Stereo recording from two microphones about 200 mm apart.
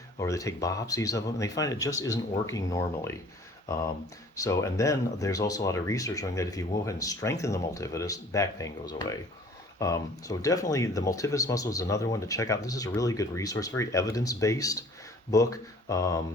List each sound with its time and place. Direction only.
0.2 s speech: 15° left (ahead or behind)
4.4 s speech: 15° left (ahead or behind)